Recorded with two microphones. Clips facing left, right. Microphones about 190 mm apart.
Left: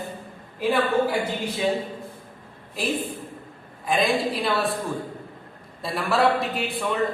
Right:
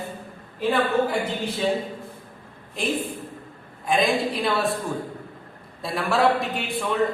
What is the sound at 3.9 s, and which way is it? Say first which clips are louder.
Speech: right 1 dB; centre (ahead or behind).